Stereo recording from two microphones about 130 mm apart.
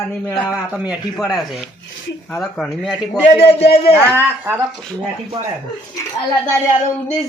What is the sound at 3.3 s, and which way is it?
Speech, 55° left (ahead or behind).